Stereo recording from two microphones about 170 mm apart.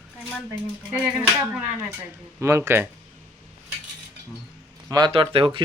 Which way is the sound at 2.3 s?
15° right (ahead or behind).